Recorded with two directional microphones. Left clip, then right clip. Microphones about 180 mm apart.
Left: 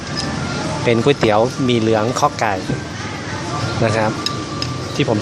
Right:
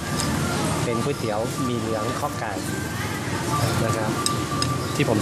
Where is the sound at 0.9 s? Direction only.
30° left (ahead or behind).